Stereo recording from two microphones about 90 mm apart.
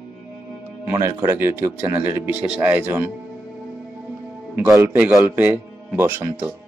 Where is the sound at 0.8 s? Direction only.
30° right (ahead or behind).